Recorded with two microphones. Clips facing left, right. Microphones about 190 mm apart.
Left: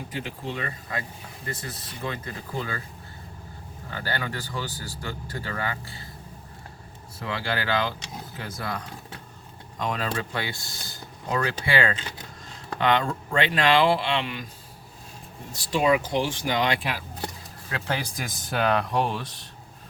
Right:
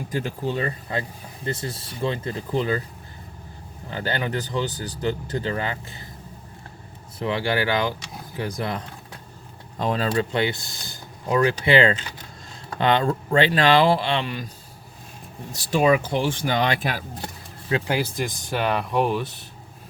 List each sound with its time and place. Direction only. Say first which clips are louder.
0.1 s speech: right 8 dB; 40° right (ahead or behind); by 2.8 s 20° right (ahead or behind)
3.8 s speech: right 5 dB; 20° right (ahead or behind)
7.2 s speech: right 6 dB; 20° right (ahead or behind)
9.7 s speech: right 6 dB; 30° right (ahead or behind)
16.0 s speech: right 2 dB; 55° right (ahead or behind)
17.7 s speech: right 7 dB; 20° right (ahead or behind)
17.9 s speech: right 6 dB; centre (ahead or behind)